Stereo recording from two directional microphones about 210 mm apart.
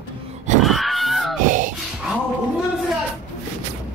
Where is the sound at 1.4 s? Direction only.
40° right (ahead or behind).